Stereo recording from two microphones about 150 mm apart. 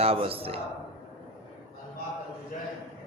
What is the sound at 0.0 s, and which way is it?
Speech, 40° right (ahead or behind).